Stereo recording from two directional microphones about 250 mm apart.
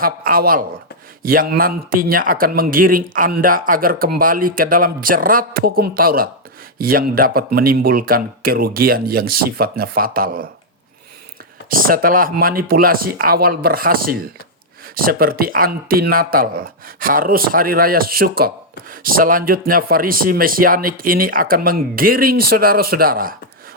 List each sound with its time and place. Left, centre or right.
0.0 s a man's voice: right
11.7 s a man's voice: right